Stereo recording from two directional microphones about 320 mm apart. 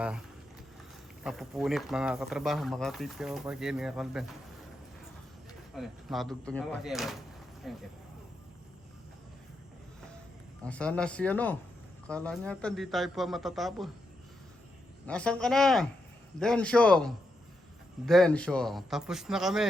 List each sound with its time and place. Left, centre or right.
1.2 s speech: centre
5.7 s speech: centre
10.7 s speech: centre
15.0 s speech: centre